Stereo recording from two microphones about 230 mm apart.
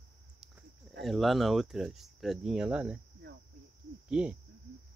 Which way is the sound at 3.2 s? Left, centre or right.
Right.